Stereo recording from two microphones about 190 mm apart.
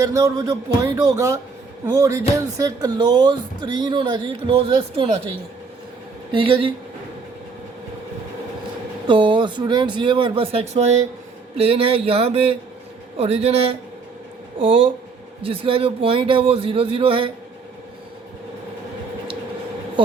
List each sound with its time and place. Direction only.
0.0 s a woman's voice: 15° right (ahead or behind)
6.3 s a woman's voice: 30° right (ahead or behind)
9.0 s a woman's voice: 25° right (ahead or behind)